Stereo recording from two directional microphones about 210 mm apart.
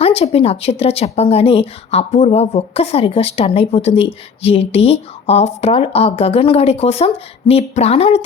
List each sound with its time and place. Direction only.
0.0 s speech: 30° left (ahead or behind)